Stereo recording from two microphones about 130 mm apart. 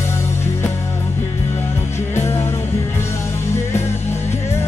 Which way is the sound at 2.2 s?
20° left (ahead or behind).